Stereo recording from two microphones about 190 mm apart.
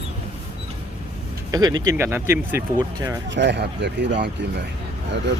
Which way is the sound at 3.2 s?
65° right (ahead or behind).